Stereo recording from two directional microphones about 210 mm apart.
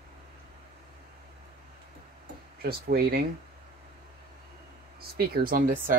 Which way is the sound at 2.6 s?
45° right (ahead or behind).